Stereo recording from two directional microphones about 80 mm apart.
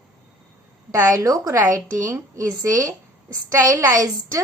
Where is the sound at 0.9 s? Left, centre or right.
Right.